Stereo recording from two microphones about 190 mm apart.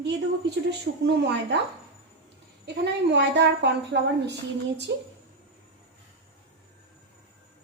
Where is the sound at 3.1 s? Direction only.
65° right (ahead or behind).